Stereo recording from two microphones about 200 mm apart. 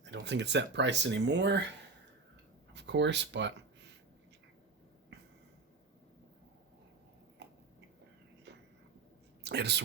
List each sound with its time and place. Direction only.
0.0 s speech: 60° right (ahead or behind)
2.7 s speech: 60° right (ahead or behind)
8.5 s whispering: 60° right (ahead or behind)
9.4 s speech: 55° right (ahead or behind)